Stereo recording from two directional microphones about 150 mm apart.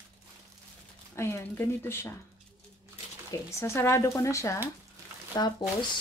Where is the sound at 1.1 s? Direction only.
15° left (ahead or behind).